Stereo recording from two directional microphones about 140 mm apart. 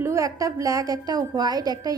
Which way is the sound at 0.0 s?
20° right (ahead or behind).